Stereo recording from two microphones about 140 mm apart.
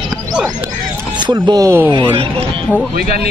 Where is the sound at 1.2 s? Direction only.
30° right (ahead or behind).